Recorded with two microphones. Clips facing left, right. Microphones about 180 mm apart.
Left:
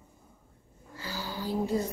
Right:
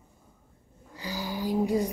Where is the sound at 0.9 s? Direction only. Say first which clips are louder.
Right 4 dB; 15° right (ahead or behind).